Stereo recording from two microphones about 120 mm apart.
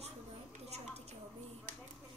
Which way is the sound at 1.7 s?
80° right.